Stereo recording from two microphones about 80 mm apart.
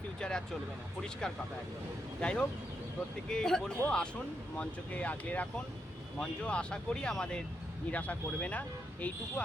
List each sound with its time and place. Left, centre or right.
0.2 s speech: centre